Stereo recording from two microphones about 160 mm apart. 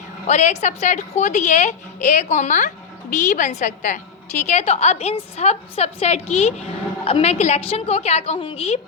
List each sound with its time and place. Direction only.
0.3 s a woman's voice: 45° left (ahead or behind)